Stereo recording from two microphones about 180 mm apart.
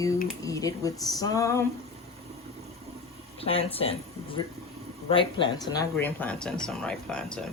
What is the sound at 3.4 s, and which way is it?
Speech, 35° left (ahead or behind).